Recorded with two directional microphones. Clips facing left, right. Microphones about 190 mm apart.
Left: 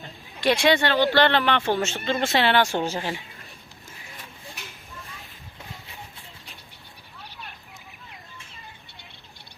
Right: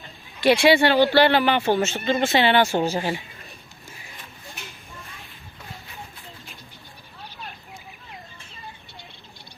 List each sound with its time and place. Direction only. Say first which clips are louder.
0.4 s speech: right 4 dB; 10° right (ahead or behind)